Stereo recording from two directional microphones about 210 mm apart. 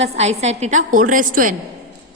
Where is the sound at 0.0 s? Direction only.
30° right (ahead or behind).